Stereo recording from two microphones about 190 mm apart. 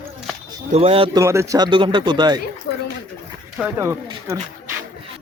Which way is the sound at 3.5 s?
10° right (ahead or behind).